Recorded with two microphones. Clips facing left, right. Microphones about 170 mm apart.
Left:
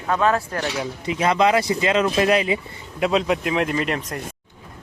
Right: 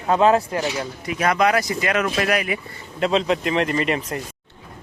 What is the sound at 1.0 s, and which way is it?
Speech, 25° left (ahead or behind).